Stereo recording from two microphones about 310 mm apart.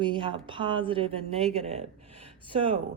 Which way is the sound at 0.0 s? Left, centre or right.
Centre.